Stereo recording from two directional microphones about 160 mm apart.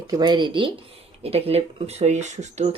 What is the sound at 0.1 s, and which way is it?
Speech, 25° right (ahead or behind).